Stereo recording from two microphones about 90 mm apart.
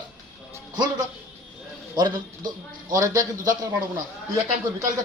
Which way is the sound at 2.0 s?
50° right (ahead or behind).